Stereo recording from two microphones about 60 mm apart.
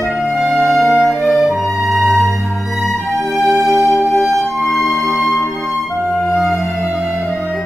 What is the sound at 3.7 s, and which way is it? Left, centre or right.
Music, left.